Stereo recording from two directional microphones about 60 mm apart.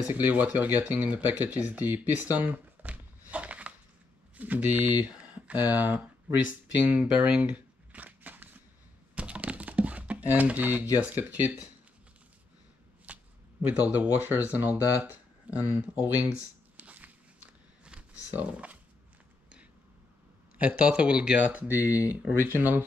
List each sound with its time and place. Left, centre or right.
0.1 s speech: right
6.9 s guitar: right
9.1 s computer keyboard: right
11.1 s speech: right
13.0 s shuffling cards: right
14.2 s speech: right
16.7 s a sound: right
18.3 s speech: right
20.5 s speech: right
21.5 s speech: right